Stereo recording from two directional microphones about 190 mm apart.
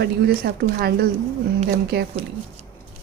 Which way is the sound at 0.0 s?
55° right (ahead or behind).